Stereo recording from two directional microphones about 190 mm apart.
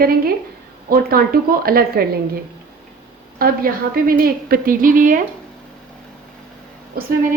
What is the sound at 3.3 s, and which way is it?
A woman's voice, 50° right (ahead or behind).